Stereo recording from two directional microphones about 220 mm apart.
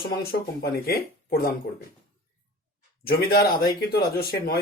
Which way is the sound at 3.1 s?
45° left (ahead or behind).